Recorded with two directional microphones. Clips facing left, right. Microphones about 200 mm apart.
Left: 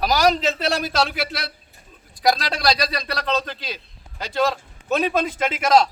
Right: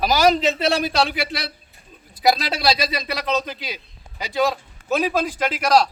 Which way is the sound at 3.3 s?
15° right (ahead or behind).